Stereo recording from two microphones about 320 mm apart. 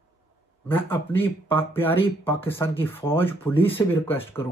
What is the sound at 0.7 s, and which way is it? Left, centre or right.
Speech, centre.